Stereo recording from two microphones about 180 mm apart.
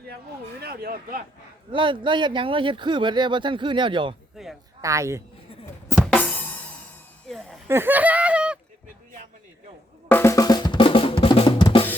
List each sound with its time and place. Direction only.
0.6 s speech: 55° right (ahead or behind)
1.7 s speech: 25° right (ahead or behind)
4.4 s speech: 5° right (ahead or behind)
4.8 s speech: 15° right (ahead or behind)
5.9 s music: 10° left (ahead or behind)
7.3 s a sound: centre (ahead or behind)
7.7 s speech: 10° right (ahead or behind)
10.1 s drum: 15° left (ahead or behind)